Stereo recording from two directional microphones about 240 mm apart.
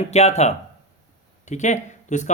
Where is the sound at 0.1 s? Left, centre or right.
Left.